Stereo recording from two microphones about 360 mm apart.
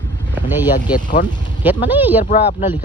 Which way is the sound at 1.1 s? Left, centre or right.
Centre.